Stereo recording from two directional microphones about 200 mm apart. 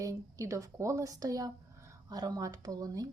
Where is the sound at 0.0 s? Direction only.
15° right (ahead or behind).